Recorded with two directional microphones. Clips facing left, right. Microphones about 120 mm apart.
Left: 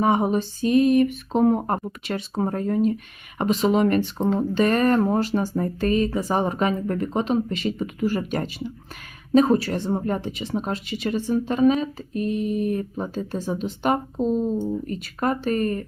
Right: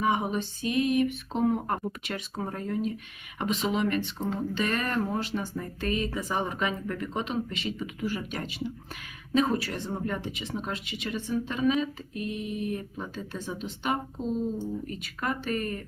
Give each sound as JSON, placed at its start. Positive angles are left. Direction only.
{"t": 0.0, "sound": "speech", "side_deg": 40}
{"t": 15.0, "sound": "speech", "side_deg": 40}